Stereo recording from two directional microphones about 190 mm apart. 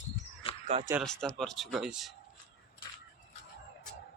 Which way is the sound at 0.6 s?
35° right (ahead or behind).